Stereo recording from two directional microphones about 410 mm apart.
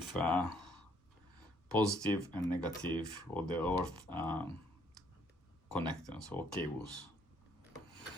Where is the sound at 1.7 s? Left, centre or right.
Centre.